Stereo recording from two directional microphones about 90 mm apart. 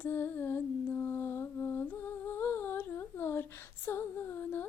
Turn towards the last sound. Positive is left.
turn(degrees=25)  # may be behind; listen again after turning